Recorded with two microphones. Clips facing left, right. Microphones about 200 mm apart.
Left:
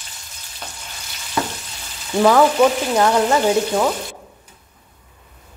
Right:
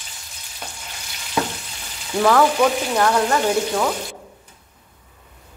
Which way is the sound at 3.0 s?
15° left (ahead or behind).